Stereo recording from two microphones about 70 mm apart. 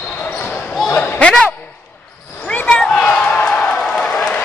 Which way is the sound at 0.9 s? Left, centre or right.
Left.